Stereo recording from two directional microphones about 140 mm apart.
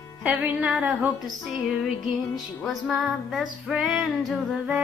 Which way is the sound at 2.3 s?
Centre (ahead or behind).